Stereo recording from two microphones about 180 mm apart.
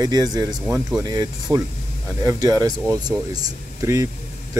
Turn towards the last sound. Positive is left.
turn(degrees=-20)  # may be behind; listen again after turning